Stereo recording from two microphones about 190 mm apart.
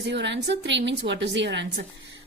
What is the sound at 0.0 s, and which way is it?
A woman's voice, 65° right (ahead or behind).